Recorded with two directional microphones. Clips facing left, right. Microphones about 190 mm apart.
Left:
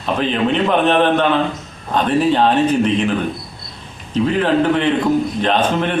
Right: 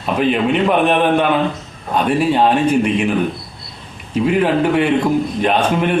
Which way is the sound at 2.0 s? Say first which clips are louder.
Even; 10° right (ahead or behind).